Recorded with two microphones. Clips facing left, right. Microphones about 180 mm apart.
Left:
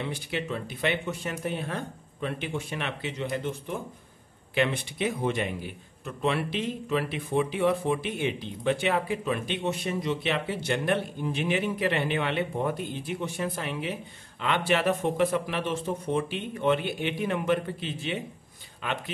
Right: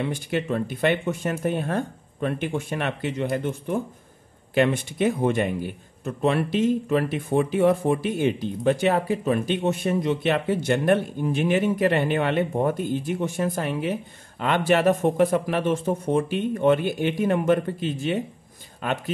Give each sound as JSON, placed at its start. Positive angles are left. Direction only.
{"t": 0.0, "sound": "a man's voice", "side_deg": -50}